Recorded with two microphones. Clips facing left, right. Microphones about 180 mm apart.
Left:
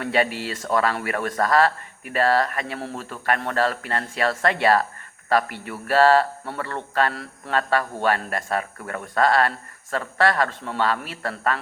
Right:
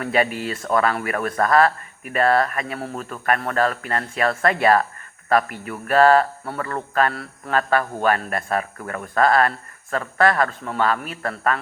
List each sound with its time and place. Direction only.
0.0 s speech: 30° left (ahead or behind)